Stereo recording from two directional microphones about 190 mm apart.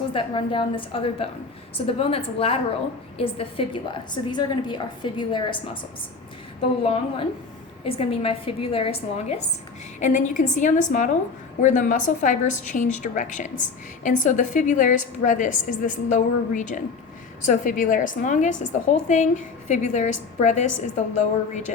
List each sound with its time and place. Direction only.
0.1 s a woman's voice: 25° left (ahead or behind)
6.8 s a woman's voice: 30° left (ahead or behind)
10.0 s a woman's voice: 40° left (ahead or behind)